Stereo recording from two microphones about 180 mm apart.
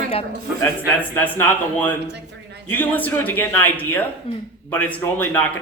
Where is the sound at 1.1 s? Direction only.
10° left (ahead or behind).